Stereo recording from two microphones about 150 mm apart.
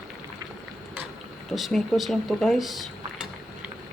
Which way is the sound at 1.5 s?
Centre (ahead or behind).